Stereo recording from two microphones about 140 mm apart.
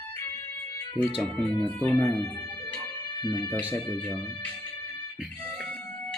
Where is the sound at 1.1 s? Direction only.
Centre (ahead or behind).